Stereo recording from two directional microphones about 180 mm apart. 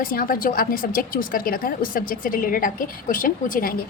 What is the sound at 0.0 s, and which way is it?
Speech, 50° left (ahead or behind).